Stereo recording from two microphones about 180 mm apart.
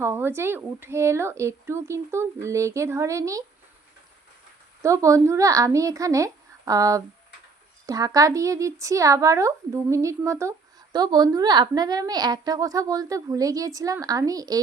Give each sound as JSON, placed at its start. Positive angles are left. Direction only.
{"t": 0.0, "sound": "speech", "side_deg": -10}
{"t": 4.8, "sound": "a woman's voice", "side_deg": -15}